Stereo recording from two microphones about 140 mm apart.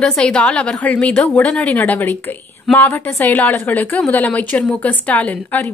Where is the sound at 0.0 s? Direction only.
5° left (ahead or behind).